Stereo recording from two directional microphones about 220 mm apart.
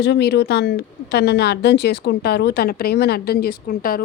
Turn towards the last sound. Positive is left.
turn(degrees=40)  # may be behind; listen again after turning